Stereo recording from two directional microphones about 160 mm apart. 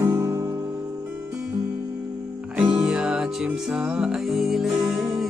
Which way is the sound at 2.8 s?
5° right (ahead or behind).